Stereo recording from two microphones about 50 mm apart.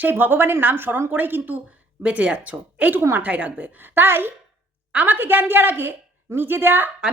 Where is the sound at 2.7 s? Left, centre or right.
Right.